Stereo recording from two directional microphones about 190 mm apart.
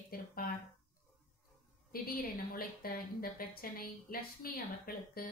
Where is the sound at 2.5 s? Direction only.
50° left (ahead or behind).